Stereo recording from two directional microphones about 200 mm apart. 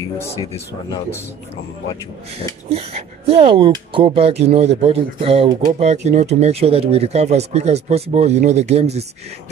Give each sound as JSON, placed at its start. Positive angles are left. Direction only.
{"t": 2.7, "sound": "speech", "side_deg": -30}